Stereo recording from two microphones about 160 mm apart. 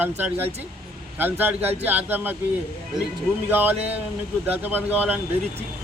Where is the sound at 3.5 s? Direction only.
10° right (ahead or behind).